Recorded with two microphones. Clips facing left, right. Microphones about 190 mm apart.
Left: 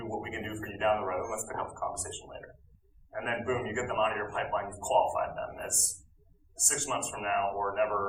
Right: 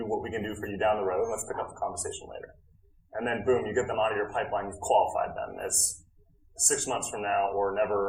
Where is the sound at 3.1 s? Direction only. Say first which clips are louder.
Right 6 dB; 40° right (ahead or behind).